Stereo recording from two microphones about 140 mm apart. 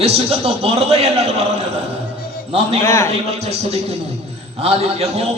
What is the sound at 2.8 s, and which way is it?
Speech, 20° left (ahead or behind).